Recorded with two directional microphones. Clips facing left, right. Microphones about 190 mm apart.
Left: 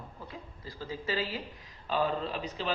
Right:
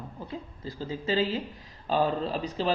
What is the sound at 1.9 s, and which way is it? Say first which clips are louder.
Speech: right 4 dB; 35° right (ahead or behind).